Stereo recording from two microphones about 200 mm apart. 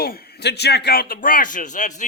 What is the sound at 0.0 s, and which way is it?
Speech, 50° left (ahead or behind).